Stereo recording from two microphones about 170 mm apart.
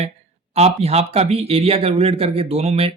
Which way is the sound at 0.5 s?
40° right (ahead or behind).